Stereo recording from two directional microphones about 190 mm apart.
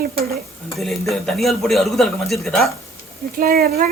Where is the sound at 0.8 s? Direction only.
Centre (ahead or behind).